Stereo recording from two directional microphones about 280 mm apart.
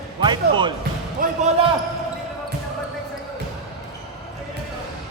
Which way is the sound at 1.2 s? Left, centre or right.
Right.